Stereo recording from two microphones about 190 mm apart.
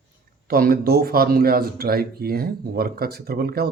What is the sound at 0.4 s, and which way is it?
Speech, 50° right (ahead or behind).